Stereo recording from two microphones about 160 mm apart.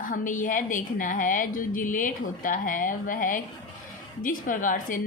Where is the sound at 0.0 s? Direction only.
55° left (ahead or behind).